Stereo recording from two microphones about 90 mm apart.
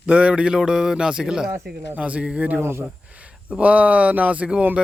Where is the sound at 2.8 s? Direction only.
15° right (ahead or behind).